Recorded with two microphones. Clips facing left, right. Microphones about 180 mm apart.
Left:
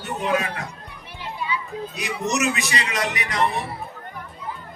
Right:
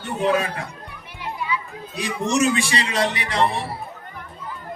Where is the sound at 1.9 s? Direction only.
30° right (ahead or behind).